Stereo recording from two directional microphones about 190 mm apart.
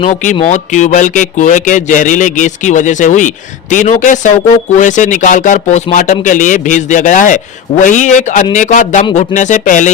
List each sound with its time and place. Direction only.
0.0 s a man's voice: 40° left (ahead or behind)